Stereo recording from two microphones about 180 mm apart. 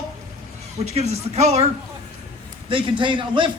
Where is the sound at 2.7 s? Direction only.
30° right (ahead or behind).